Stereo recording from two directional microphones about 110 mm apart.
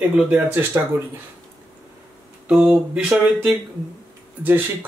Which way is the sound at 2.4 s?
10° right (ahead or behind).